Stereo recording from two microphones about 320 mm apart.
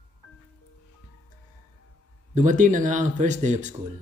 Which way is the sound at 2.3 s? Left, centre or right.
Right.